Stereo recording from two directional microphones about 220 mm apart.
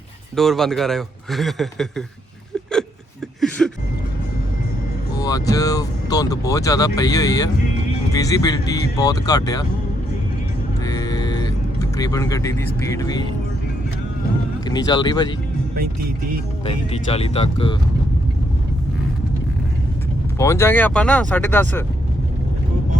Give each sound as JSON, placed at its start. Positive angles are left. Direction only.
{"t": 0.3, "sound": "a man's voice", "side_deg": 0}
{"t": 3.6, "sound": "vehicle", "side_deg": 0}
{"t": 5.1, "sound": "speech", "side_deg": 15}
{"t": 10.8, "sound": "vehicle", "side_deg": 15}
{"t": 14.7, "sound": "speech", "side_deg": 20}
{"t": 16.6, "sound": "speech", "side_deg": 25}
{"t": 20.4, "sound": "speech", "side_deg": 10}